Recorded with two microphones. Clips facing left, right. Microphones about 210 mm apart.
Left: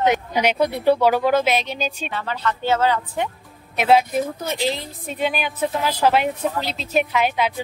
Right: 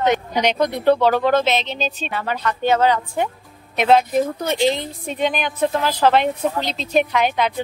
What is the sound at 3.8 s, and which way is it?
Speech, 10° left (ahead or behind).